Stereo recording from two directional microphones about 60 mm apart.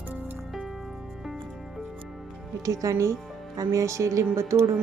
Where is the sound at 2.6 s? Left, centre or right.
Right.